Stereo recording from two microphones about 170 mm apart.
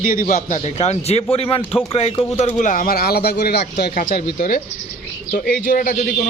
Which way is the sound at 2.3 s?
45° left (ahead or behind).